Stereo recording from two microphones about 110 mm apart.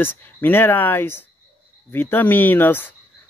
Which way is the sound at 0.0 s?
20° left (ahead or behind).